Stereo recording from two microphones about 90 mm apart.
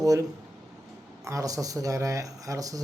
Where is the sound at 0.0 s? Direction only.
40° right (ahead or behind).